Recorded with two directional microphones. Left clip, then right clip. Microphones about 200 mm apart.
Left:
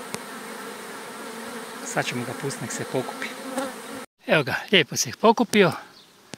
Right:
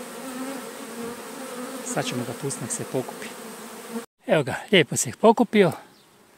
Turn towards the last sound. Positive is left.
turn(degrees=-15)  # may be behind; listen again after turning